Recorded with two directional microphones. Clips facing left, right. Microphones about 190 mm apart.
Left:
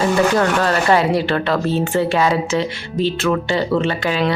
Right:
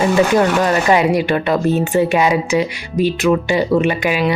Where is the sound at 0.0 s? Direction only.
15° right (ahead or behind).